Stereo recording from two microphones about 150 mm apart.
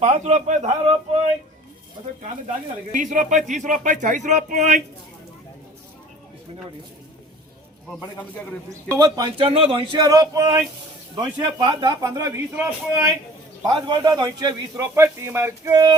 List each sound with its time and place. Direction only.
0.0 s a man's voice: 50° right (ahead or behind)
2.9 s speech: 60° right (ahead or behind)
8.9 s a man's voice: 25° right (ahead or behind)
9.5 s a man's voice: 40° right (ahead or behind); by 13.1 s 15° right (ahead or behind)
13.7 s a man's voice: 30° right (ahead or behind)
14.9 s a sound: 15° right (ahead or behind)